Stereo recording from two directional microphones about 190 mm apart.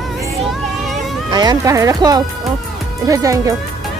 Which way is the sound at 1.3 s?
20° right (ahead or behind).